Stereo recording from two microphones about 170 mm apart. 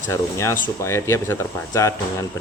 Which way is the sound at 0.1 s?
15° left (ahead or behind).